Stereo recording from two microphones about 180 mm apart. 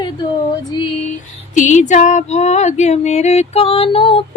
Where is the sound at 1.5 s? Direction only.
45° left (ahead or behind).